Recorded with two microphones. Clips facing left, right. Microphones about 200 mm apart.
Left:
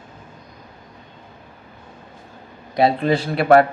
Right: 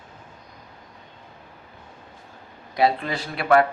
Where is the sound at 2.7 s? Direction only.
25° left (ahead or behind).